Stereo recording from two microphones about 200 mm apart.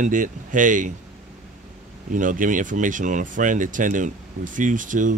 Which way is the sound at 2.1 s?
40° right (ahead or behind).